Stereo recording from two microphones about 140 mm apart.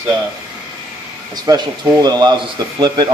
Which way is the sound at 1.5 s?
25° right (ahead or behind).